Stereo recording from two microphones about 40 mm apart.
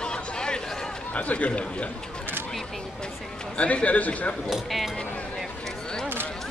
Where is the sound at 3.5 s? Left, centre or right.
Left.